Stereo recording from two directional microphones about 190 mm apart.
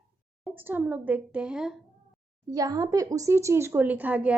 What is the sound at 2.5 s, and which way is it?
Speech, 20° right (ahead or behind).